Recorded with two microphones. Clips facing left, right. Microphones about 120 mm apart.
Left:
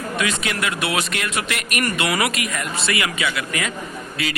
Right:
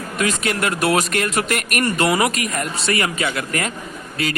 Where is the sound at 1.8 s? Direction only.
35° right (ahead or behind).